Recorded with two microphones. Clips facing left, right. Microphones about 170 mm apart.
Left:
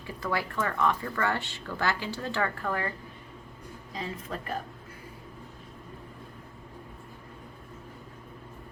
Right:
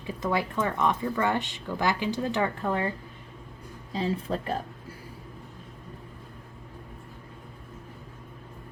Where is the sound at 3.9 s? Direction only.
30° right (ahead or behind).